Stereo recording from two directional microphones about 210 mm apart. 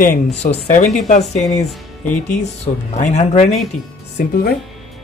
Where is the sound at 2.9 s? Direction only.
35° left (ahead or behind).